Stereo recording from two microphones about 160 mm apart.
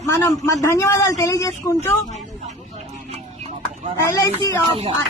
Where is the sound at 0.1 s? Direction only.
15° left (ahead or behind).